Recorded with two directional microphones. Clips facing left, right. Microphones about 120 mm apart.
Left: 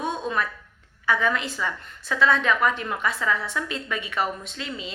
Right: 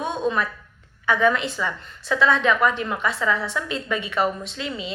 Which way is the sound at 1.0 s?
25° right (ahead or behind).